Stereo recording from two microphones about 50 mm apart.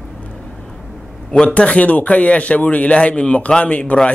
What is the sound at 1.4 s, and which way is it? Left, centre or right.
A man's voice, left.